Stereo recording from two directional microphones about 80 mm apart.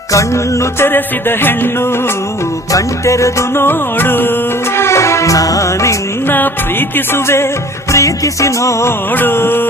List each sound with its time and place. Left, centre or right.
0.1 s music: left
2.7 s music: left
4.8 s music: left
6.2 s music: left
7.9 s music: left
9.1 s music: left